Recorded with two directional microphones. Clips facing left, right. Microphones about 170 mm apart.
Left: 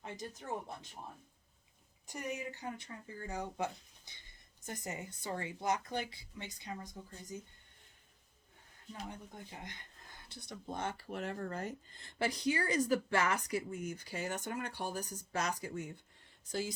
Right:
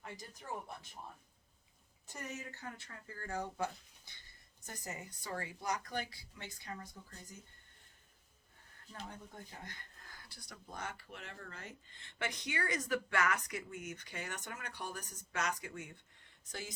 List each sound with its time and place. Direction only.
2.0 s speech: 15° left (ahead or behind)
8.9 s speech: 15° left (ahead or behind); by 16.7 s 30° left (ahead or behind)